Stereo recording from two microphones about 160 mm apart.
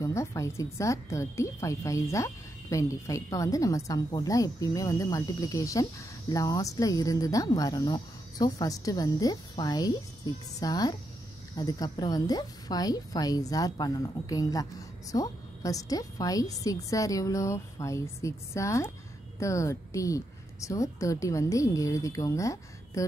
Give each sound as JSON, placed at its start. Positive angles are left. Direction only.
{"t": 0.0, "sound": "a woman's voice", "side_deg": 20}